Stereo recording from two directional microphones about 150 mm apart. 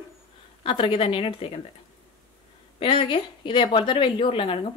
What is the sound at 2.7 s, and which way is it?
A woman's voice, 35° left (ahead or behind).